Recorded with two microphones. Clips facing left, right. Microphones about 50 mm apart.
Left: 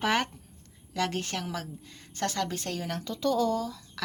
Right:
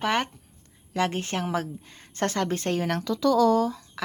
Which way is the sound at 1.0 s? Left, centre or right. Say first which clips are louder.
Right 4 dB; right.